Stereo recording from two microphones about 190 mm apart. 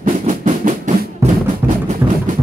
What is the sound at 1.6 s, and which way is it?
Music, 10° right (ahead or behind).